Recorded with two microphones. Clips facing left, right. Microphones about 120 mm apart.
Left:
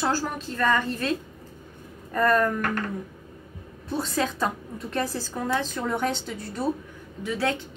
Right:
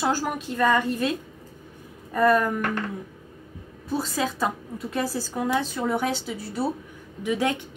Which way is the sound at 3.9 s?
5° right (ahead or behind).